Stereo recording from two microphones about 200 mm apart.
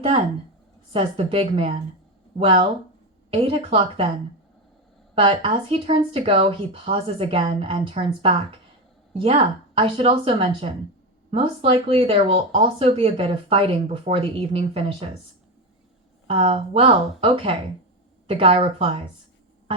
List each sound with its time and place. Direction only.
0.9 s speech: 30° right (ahead or behind)
5.1 s speech: 25° right (ahead or behind)
16.2 s speech: 30° right (ahead or behind)